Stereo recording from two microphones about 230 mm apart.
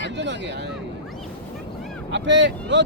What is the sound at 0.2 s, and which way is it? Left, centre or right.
Speech, right.